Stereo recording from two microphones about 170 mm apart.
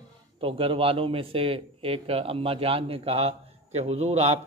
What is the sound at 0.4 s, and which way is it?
A man's voice, 30° right (ahead or behind).